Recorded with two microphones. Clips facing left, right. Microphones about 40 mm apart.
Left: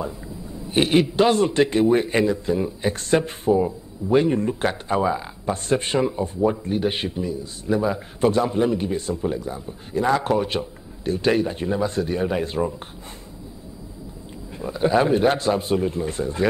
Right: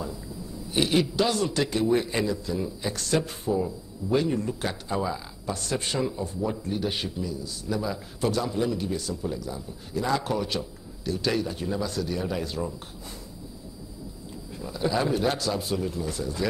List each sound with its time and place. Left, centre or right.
0.7 s a man's voice: left
14.6 s a man's voice: left